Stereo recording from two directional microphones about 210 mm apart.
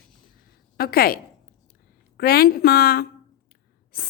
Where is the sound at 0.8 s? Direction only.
45° left (ahead or behind).